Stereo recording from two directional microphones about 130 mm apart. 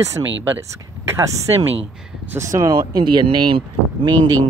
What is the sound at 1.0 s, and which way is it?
Speech, 20° right (ahead or behind).